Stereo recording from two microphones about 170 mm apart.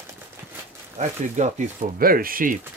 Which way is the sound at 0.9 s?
45° right (ahead or behind).